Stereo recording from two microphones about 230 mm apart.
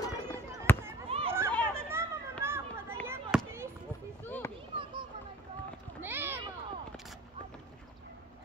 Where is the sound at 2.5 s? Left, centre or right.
Centre.